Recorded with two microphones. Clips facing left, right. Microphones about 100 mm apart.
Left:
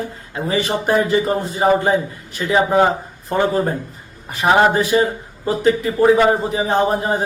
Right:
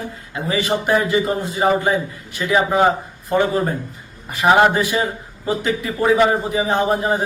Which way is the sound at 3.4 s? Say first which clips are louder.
Left 1 dB; 35° left (ahead or behind).